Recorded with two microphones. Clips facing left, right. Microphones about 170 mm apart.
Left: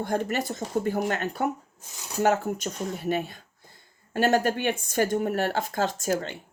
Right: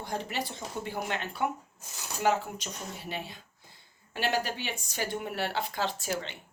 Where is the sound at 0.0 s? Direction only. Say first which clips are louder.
Left 7 dB; 50° left (ahead or behind).